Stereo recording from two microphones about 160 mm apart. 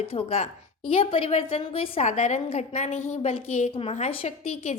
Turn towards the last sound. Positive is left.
turn(degrees=40)  # may be behind; listen again after turning